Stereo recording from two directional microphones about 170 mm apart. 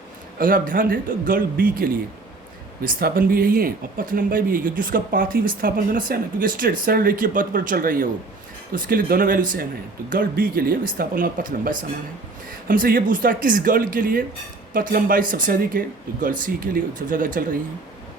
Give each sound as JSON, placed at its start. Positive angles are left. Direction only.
{"t": 0.3, "sound": "speech", "side_deg": -55}